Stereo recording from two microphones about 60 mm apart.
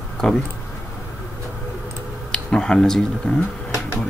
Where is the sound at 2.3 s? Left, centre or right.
Centre.